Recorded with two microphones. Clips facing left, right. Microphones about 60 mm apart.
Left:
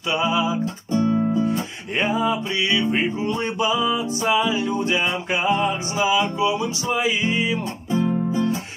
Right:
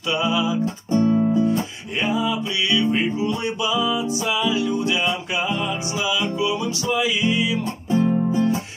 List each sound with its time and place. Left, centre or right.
0.1 s music: left
2.0 s music: left